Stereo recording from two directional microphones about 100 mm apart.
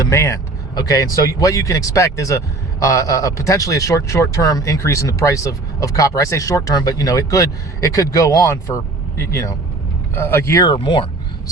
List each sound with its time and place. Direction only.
0.0 s a man's voice: 30° left (ahead or behind)
10.2 s speech: 25° left (ahead or behind)
10.8 s speech: 60° left (ahead or behind)